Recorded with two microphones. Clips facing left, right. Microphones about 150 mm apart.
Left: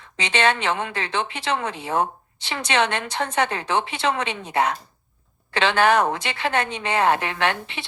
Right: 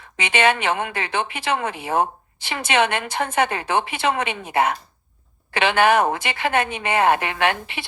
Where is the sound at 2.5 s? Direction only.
10° right (ahead or behind).